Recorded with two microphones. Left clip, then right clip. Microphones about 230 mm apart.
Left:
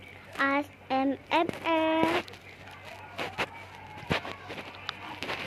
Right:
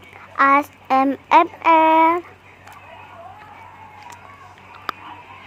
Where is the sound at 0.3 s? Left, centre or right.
Right.